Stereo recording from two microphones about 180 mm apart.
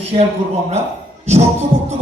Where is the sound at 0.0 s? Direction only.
30° right (ahead or behind).